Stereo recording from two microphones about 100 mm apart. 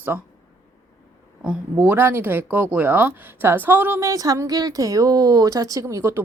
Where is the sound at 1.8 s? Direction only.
25° right (ahead or behind).